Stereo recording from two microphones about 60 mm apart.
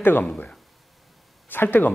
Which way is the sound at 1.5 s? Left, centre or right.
Left.